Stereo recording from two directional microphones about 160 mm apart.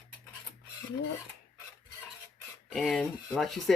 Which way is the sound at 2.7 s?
Centre (ahead or behind).